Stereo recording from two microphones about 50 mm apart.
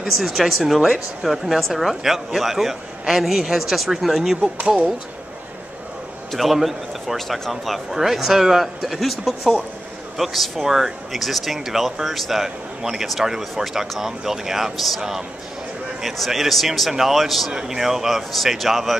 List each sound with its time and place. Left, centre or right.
0.0 s speech: centre
4.6 s speech: right
6.3 s speech: centre
17.5 s speech: centre